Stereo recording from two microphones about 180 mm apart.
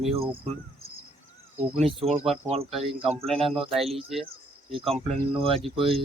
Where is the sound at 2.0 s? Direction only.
35° right (ahead or behind).